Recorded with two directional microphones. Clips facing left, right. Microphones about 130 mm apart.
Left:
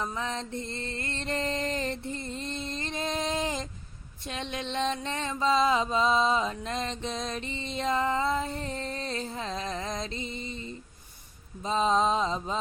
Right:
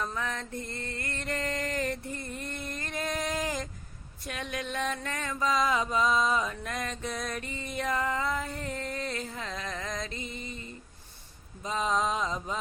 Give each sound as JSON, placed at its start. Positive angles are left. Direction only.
{"t": 0.0, "sound": "music", "side_deg": 20}
{"t": 4.3, "sound": "mantra", "side_deg": 25}
{"t": 11.6, "sound": "music", "side_deg": 30}